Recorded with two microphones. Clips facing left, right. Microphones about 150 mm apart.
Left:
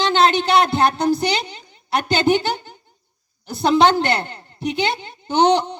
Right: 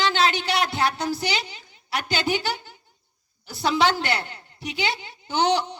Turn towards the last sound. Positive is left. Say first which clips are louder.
# left 6 dB
turn(degrees=20)  # may be behind; listen again after turning